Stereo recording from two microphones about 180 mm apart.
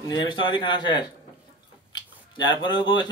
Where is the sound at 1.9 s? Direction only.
25° left (ahead or behind).